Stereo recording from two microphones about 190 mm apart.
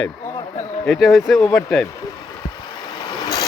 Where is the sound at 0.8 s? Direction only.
Centre (ahead or behind).